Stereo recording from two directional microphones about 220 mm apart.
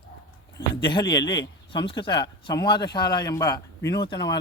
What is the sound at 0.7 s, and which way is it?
A man's voice, 20° left (ahead or behind).